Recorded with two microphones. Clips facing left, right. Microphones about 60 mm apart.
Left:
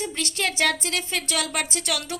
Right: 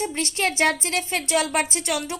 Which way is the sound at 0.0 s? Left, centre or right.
Right.